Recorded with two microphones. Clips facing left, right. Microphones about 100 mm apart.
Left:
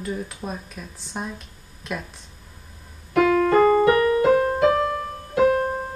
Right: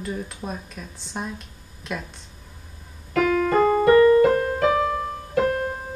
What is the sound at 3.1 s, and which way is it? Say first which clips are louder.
Keyboard: left 3 dB; 25° left (ahead or behind).